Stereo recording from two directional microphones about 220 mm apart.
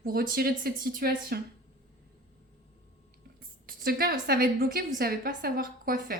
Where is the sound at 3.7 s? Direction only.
40° right (ahead or behind).